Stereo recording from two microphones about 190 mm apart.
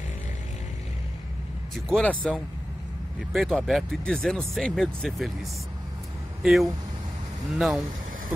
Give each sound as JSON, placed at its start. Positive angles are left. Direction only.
{"t": 1.9, "sound": "speech", "side_deg": 5}
{"t": 6.4, "sound": "speech", "side_deg": 0}